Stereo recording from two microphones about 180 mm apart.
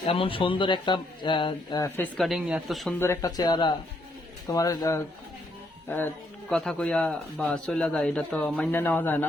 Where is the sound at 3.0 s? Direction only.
15° left (ahead or behind).